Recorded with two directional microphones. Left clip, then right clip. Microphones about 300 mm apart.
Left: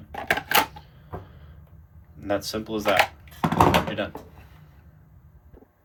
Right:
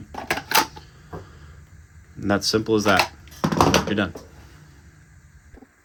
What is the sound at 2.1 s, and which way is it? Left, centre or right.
Speech, right.